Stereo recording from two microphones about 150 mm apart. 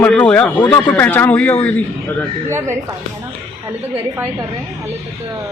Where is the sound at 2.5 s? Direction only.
15° right (ahead or behind).